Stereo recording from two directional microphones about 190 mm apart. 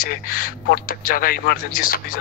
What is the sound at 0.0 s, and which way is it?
Speech, 50° left (ahead or behind).